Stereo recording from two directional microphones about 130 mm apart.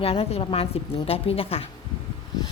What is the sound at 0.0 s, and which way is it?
A woman's voice, 50° left (ahead or behind).